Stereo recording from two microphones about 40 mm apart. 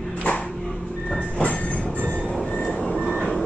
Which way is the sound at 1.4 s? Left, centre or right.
Left.